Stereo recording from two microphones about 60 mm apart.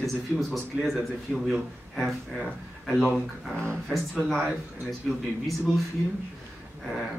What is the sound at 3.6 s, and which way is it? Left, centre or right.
Speech, centre.